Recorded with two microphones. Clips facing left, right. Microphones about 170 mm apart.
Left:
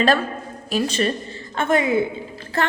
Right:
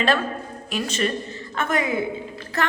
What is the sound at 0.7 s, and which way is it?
A woman's voice, 35° left (ahead or behind).